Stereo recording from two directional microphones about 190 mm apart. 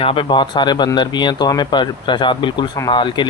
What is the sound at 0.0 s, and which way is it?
Speech, 25° left (ahead or behind).